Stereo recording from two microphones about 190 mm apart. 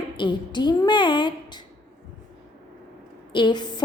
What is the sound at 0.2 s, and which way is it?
A woman's voice, 25° left (ahead or behind).